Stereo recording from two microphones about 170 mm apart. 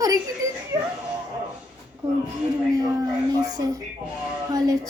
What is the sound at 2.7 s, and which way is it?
A child's voice, 20° right (ahead or behind).